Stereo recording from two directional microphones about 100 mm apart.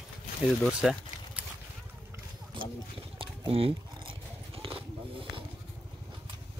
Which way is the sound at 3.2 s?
70° right (ahead or behind).